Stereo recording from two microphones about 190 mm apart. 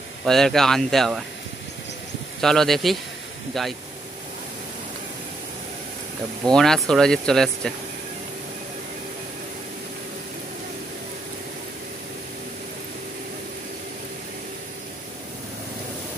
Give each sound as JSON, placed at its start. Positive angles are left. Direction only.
{"t": 0.2, "sound": "speech", "side_deg": 0}
{"t": 2.4, "sound": "speech", "side_deg": 0}
{"t": 6.4, "sound": "speech", "side_deg": 5}